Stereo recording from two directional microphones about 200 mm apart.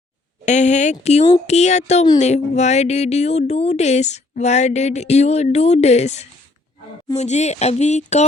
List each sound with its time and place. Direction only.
0.4 s speech: 35° left (ahead or behind)